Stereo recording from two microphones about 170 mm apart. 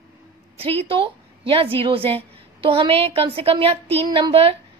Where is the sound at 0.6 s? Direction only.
35° right (ahead or behind).